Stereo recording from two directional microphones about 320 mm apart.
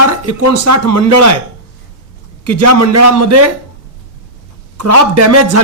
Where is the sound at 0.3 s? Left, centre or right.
Right.